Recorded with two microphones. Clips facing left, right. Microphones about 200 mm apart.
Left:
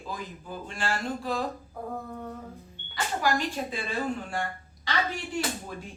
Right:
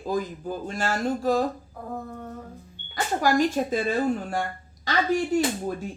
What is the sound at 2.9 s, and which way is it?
Speech, 45° right (ahead or behind).